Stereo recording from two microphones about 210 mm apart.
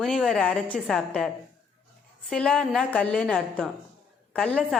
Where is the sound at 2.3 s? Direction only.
5° left (ahead or behind).